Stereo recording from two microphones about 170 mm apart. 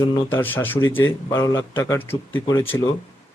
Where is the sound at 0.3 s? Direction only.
10° left (ahead or behind).